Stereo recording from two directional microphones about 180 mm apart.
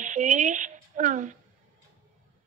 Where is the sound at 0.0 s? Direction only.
45° right (ahead or behind).